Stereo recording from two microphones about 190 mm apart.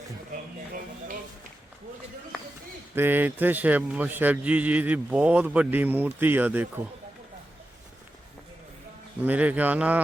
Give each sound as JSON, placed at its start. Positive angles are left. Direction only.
{"t": 0.7, "sound": "speech", "side_deg": -45}
{"t": 2.9, "sound": "a man's voice", "side_deg": -10}
{"t": 9.2, "sound": "a man's voice", "side_deg": -10}